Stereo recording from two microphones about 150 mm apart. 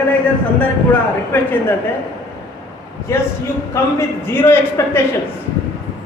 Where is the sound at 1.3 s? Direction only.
15° left (ahead or behind).